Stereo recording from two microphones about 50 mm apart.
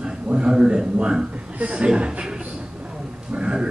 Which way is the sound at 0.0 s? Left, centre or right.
Centre.